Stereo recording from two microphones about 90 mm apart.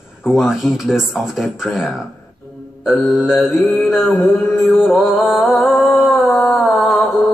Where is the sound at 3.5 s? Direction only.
20° left (ahead or behind).